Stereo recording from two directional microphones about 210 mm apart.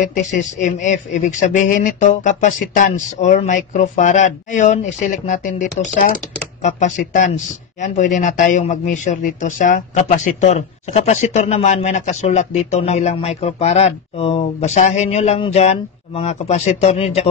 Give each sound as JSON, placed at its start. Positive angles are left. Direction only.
{"t": 0.0, "sound": "speech", "side_deg": 35}